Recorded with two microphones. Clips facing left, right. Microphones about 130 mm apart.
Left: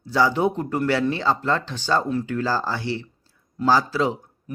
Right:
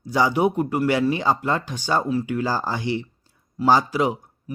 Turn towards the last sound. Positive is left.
turn(degrees=-15)  # may be behind; listen again after turning